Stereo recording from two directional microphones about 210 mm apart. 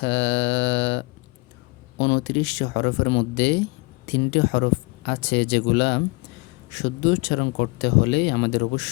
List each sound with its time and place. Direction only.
0.0 s mantra: 55° left (ahead or behind)
2.0 s speech: 55° left (ahead or behind)